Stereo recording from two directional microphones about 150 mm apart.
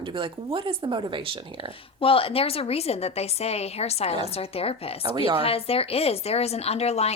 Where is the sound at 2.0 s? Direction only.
40° left (ahead or behind).